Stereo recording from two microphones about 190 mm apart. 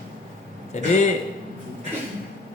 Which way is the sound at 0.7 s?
40° left (ahead or behind).